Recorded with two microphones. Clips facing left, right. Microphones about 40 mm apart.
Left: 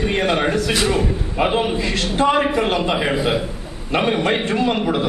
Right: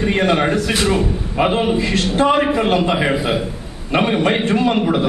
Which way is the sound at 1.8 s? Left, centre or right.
Right.